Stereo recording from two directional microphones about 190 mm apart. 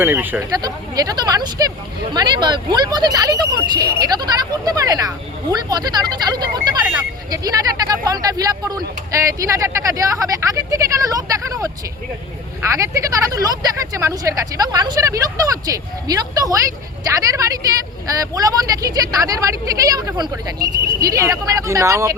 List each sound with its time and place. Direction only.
0.0 s speech: 10° right (ahead or behind)
12.7 s speech: 15° right (ahead or behind)